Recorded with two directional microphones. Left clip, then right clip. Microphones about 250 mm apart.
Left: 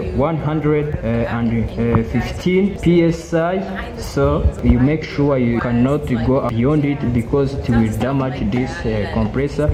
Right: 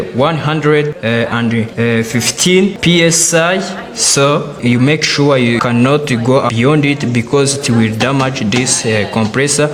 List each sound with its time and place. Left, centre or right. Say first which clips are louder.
0.2 s speech: right 6 dB; right